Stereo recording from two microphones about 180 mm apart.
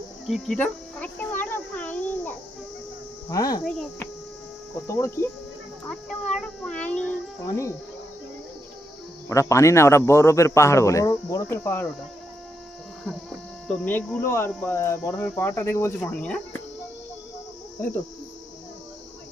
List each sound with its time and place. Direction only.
0.3 s a sound: centre (ahead or behind)
3.2 s cricket: 20° left (ahead or behind)
3.6 s child singing: centre (ahead or behind)
4.9 s speech: 15° left (ahead or behind)
6.3 s child singing: 5° left (ahead or behind)
7.4 s speech: 15° left (ahead or behind)
9.3 s speech: 15° left (ahead or behind)
13.7 s speech: 5° left (ahead or behind)